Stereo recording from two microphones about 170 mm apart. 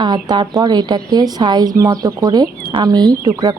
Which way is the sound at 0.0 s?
25° right (ahead or behind).